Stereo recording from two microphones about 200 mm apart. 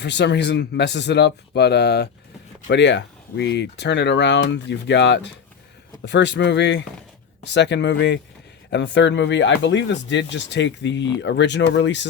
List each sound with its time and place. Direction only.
0.0 s speech: 60° left (ahead or behind)